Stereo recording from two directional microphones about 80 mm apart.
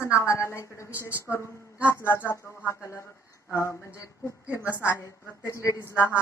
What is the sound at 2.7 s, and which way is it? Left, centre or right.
Speech, left.